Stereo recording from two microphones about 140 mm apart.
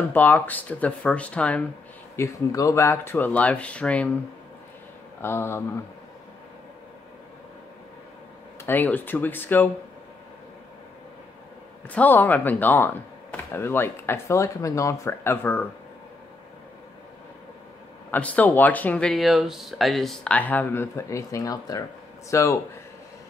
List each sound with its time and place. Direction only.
0.1 s speech: 10° left (ahead or behind)
2.1 s speech: 20° left (ahead or behind)
5.2 s speech: 20° left (ahead or behind)
8.6 s speech: 15° left (ahead or behind)
11.9 s speech: 10° left (ahead or behind)
18.1 s speech: 10° left (ahead or behind)